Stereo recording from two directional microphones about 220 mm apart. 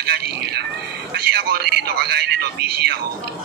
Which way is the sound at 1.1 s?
45° right (ahead or behind).